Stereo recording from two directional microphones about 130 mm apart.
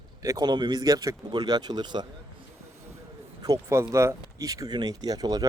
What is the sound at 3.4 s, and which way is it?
Speech, 25° right (ahead or behind).